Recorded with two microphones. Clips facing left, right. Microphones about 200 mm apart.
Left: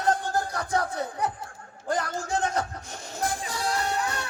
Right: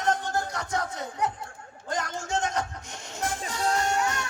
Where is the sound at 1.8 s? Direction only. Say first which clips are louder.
Left 3 dB; 35° left (ahead or behind).